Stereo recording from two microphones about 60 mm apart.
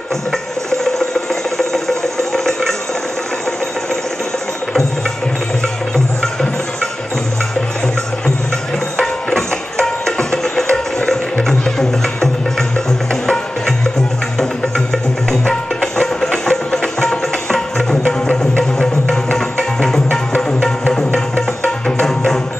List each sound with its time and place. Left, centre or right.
1.6 s music: centre
8.9 s music: centre
15.4 s music: centre